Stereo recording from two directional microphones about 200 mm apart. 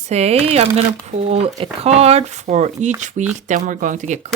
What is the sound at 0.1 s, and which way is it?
Speech, 30° right (ahead or behind).